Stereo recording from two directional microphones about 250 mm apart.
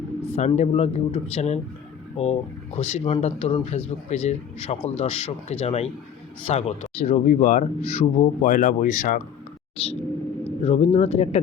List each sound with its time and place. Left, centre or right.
0.3 s speech: left